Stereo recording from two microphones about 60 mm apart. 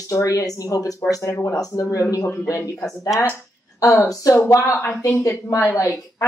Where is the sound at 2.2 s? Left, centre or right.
Left.